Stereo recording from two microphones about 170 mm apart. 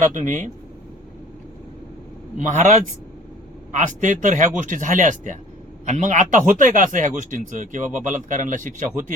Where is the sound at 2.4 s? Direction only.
45° right (ahead or behind).